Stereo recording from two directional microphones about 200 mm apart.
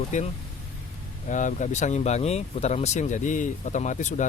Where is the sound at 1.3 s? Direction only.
40° left (ahead or behind).